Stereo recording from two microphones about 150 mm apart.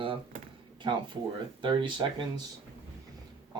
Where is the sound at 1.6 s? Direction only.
35° right (ahead or behind).